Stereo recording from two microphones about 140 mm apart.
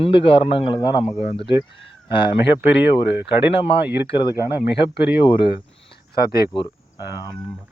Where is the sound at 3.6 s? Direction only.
40° left (ahead or behind).